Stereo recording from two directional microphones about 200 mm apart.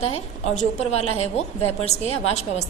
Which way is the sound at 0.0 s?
35° left (ahead or behind).